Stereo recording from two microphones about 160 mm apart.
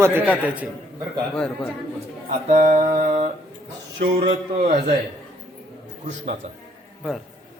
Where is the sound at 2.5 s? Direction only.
50° right (ahead or behind).